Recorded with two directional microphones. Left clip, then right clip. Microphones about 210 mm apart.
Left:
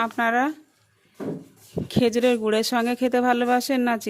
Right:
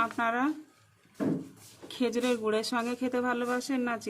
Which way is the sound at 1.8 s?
35° left (ahead or behind).